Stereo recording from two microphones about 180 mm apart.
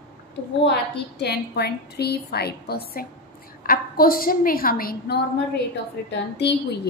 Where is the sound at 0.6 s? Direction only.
70° left (ahead or behind).